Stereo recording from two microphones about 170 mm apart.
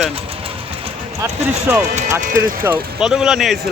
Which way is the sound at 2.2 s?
50° right (ahead or behind).